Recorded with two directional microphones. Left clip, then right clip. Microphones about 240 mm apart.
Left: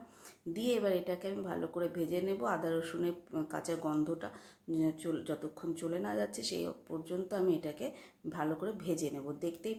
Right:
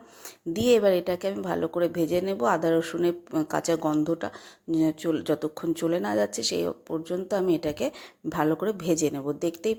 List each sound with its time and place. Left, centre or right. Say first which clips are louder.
0.5 s speech: right 12 dB; right